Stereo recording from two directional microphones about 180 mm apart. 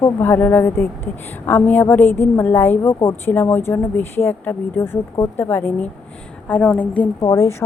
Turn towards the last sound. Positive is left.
turn(degrees=20)  # may be behind; listen again after turning